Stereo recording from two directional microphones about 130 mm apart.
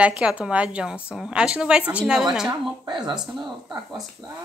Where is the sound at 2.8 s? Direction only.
35° right (ahead or behind).